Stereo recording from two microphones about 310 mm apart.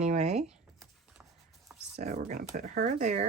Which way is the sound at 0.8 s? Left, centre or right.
Centre.